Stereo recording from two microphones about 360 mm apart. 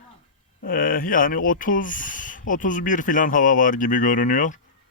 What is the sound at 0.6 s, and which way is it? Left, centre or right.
Speech, left.